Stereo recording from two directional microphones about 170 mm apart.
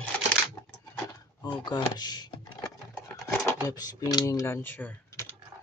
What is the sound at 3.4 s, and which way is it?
Speech, 20° left (ahead or behind).